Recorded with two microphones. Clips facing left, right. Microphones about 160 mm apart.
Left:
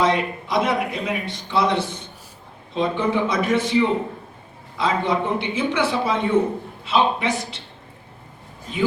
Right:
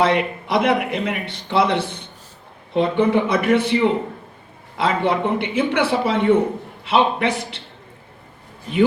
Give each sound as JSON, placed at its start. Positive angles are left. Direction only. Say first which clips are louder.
{"t": 0.0, "sound": "speech", "louder": "right 2 dB", "side_deg": -60}
{"t": 4.8, "sound": "speech", "louder": "right 2 dB", "side_deg": -60}